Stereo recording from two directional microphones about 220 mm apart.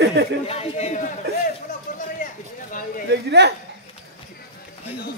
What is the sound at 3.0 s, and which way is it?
Speech, 50° right (ahead or behind).